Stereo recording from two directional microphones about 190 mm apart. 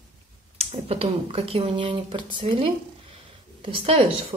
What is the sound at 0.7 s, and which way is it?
Speech, 30° right (ahead or behind).